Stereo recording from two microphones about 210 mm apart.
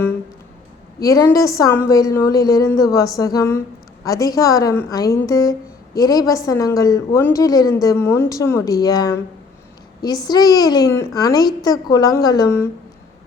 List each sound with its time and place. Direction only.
0.9 s a woman's voice: 15° left (ahead or behind)
10.2 s a child's voice: 20° left (ahead or behind)